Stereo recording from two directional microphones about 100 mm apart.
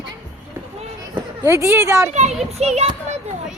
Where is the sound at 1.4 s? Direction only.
30° right (ahead or behind).